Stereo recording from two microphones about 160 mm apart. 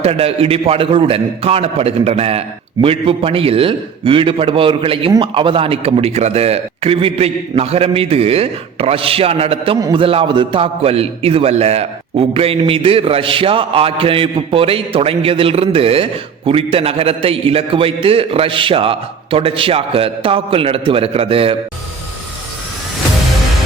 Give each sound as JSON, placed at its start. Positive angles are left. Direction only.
{"t": 0.0, "sound": "a man's voice", "side_deg": -40}